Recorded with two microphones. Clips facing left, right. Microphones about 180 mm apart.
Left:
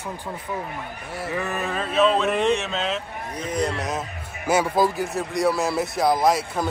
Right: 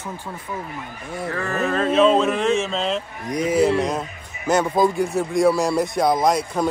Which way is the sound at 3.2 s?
10° right (ahead or behind).